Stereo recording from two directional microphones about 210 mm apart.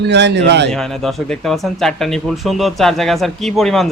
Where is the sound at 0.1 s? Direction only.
55° right (ahead or behind).